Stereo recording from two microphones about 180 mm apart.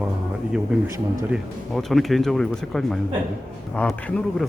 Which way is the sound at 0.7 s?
5° right (ahead or behind).